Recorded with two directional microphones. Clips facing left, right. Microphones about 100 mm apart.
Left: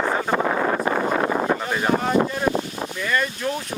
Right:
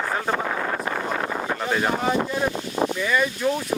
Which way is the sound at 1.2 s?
60° left (ahead or behind).